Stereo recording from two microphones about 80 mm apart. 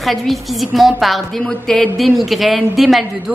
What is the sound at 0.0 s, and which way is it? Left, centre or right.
A woman's voice, centre.